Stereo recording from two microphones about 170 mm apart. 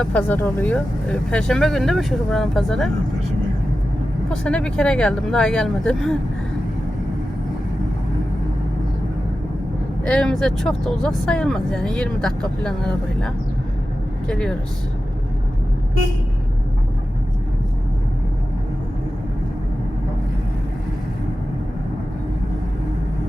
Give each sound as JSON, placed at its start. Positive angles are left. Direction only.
{"t": 0.0, "sound": "speech", "side_deg": 10}
{"t": 4.3, "sound": "speech", "side_deg": 5}
{"t": 10.0, "sound": "speech", "side_deg": 5}
{"t": 14.3, "sound": "speech", "side_deg": 5}